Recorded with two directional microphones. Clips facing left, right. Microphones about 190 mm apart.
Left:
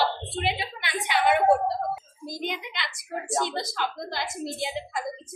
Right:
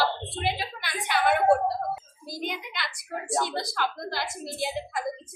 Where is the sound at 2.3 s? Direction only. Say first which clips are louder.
Left 1 dB; 20° left (ahead or behind).